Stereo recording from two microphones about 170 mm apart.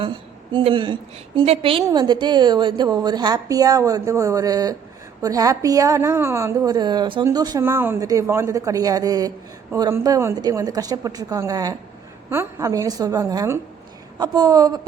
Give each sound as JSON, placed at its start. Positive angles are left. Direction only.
{"t": 0.0, "sound": "a woman's voice", "side_deg": -30}